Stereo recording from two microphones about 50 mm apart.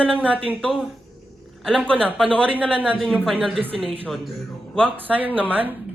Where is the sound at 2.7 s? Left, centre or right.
Right.